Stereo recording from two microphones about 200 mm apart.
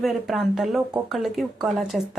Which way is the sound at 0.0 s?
Centre (ahead or behind).